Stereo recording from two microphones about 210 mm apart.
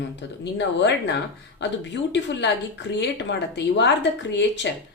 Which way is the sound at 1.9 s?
55° left (ahead or behind).